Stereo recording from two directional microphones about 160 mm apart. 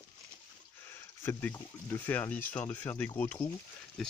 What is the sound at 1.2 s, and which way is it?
Speech, 10° left (ahead or behind).